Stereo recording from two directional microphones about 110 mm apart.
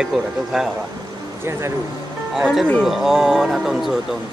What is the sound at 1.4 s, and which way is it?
Speech, 25° right (ahead or behind).